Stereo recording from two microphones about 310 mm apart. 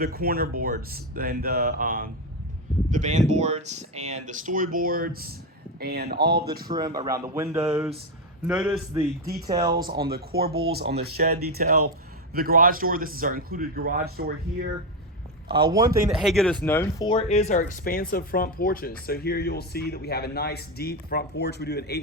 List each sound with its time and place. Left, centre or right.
0.0 s a man's voice: right
6.7 s speech: centre
10.0 s a man's voice: right
16.0 s speech: centre; by 22.0 s left